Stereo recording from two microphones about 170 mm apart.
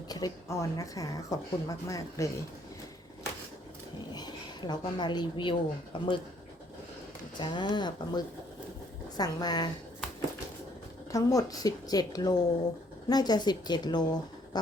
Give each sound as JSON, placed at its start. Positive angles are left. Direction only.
{"t": 0.1, "sound": "speech", "side_deg": 20}
{"t": 4.1, "sound": "a woman's voice", "side_deg": 25}
{"t": 7.3, "sound": "speech", "side_deg": 25}
{"t": 11.1, "sound": "speech", "side_deg": 20}